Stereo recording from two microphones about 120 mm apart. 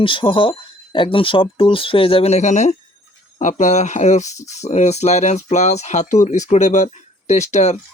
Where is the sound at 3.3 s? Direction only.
90° left.